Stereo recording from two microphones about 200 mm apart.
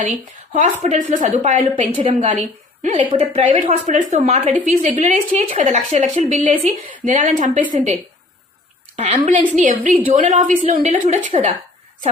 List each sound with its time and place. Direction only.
0.0 s speech: 40° right (ahead or behind)
3.0 s a woman's voice: 25° right (ahead or behind)
3.4 s speech: 40° right (ahead or behind)
9.0 s speech: 35° right (ahead or behind)